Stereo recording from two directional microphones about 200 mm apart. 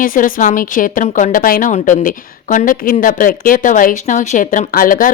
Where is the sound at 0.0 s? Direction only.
45° left (ahead or behind).